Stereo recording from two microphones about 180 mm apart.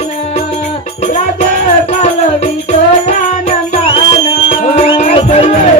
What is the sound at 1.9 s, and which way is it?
Music, 40° left (ahead or behind).